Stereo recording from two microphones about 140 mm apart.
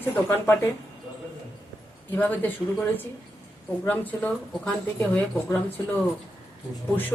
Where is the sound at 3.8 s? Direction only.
10° left (ahead or behind).